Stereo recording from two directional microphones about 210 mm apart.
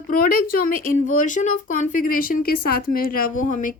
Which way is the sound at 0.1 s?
40° left (ahead or behind).